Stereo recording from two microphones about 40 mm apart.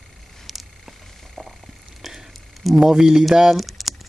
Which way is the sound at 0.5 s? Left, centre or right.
Centre.